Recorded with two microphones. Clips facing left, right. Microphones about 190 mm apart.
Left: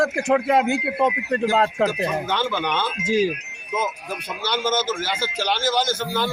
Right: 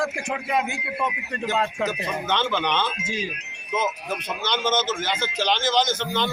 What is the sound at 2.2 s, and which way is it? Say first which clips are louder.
Speech: even; 10° left (ahead or behind).